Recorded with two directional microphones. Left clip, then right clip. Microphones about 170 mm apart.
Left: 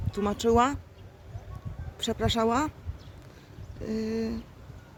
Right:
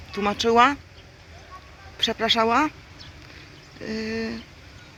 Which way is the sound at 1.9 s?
Centre (ahead or behind).